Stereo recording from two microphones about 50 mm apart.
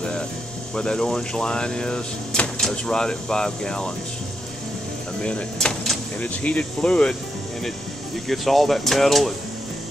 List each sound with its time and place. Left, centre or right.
0.7 s speech: centre
5.2 s speech: centre
6.2 s speech: left
8.3 s speech: centre